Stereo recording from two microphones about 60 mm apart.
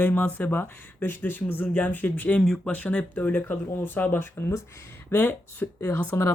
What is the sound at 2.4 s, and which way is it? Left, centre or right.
Speech, centre.